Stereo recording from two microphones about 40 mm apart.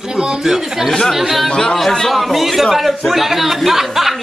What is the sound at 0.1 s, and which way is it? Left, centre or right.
Speech, right.